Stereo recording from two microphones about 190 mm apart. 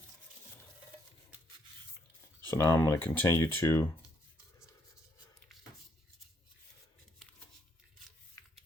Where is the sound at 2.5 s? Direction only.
10° left (ahead or behind).